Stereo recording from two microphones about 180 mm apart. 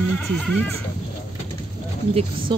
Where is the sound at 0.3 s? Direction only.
5° left (ahead or behind).